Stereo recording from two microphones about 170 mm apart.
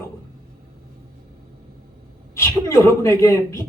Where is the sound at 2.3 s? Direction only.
20° left (ahead or behind).